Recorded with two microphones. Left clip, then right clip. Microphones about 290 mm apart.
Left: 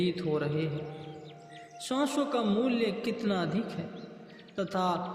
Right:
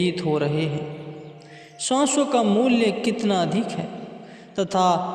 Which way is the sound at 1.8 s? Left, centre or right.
Right.